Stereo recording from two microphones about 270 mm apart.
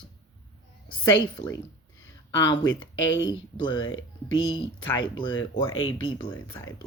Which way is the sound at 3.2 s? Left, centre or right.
Centre.